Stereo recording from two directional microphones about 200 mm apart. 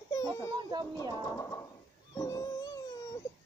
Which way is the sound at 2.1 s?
20° left (ahead or behind).